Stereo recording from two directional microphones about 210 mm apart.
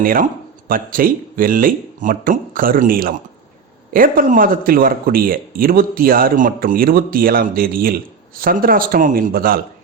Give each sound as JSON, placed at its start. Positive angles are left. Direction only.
{"t": 0.0, "sound": "speech", "side_deg": -40}